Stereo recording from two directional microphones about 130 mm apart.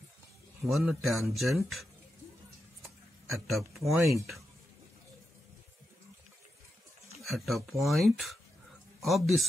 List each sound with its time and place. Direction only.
0.7 s speech: centre (ahead or behind)
3.3 s speech: centre (ahead or behind)
7.2 s speech: centre (ahead or behind)